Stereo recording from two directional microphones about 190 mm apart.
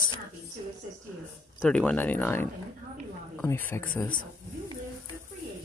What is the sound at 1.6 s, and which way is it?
Speech, 5° left (ahead or behind).